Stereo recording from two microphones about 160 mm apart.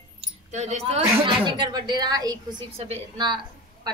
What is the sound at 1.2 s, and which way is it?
A woman's voice, 30° right (ahead or behind).